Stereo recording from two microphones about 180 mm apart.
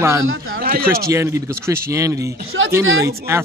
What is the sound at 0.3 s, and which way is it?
Speech, 90° right.